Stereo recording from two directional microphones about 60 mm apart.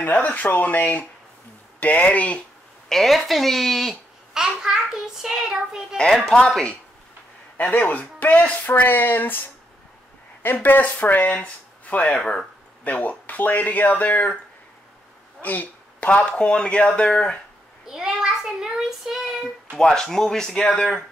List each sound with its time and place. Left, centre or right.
0.0 s speech: left
2.9 s a child's voice: centre
5.9 s speech: centre
7.5 s speech: left
10.4 s speech: left
12.2 s speech: centre
12.8 s speech: left
15.4 s speech: left
17.8 s child singing: centre
19.7 s speech: centre